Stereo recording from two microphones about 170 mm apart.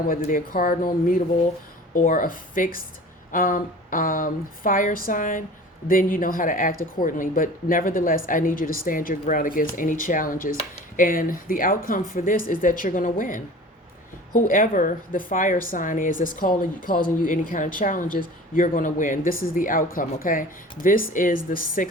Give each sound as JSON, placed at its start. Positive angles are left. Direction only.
{"t": 0.1, "sound": "a woman's voice", "side_deg": 55}